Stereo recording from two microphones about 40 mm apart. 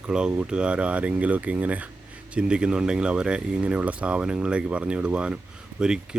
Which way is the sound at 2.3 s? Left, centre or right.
Right.